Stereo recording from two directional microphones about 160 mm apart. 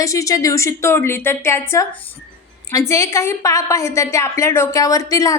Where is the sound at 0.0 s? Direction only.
20° left (ahead or behind).